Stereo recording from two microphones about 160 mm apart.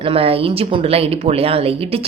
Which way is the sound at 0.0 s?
35° right (ahead or behind).